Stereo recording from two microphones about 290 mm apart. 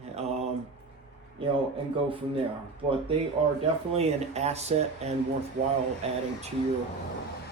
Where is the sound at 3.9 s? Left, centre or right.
Right.